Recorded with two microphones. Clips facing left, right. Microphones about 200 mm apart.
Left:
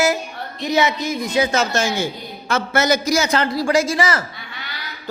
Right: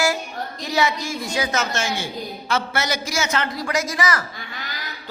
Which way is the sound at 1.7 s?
40° left (ahead or behind).